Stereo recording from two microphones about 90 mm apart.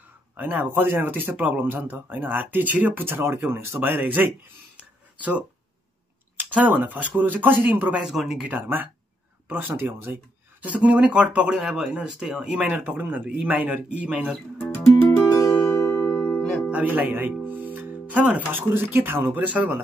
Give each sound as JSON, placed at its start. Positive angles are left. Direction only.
{"t": 0.4, "sound": "speech", "side_deg": -20}
{"t": 4.7, "sound": "a sound", "side_deg": -15}
{"t": 6.3, "sound": "speech", "side_deg": -15}
{"t": 8.0, "sound": "speech", "side_deg": -5}
{"t": 8.5, "sound": "speech", "side_deg": -20}
{"t": 15.1, "sound": "music", "side_deg": 30}
{"t": 15.5, "sound": "zither", "side_deg": 25}
{"t": 15.9, "sound": "music", "side_deg": 20}
{"t": 16.8, "sound": "speech", "side_deg": -20}